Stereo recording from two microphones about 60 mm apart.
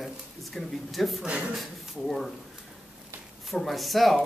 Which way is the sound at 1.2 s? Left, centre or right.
Right.